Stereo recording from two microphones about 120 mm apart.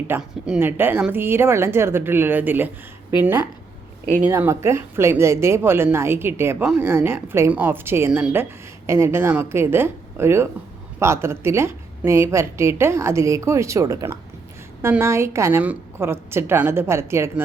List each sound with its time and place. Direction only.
0.2 s speech: 5° right (ahead or behind)
0.6 s a woman's voice: 15° right (ahead or behind)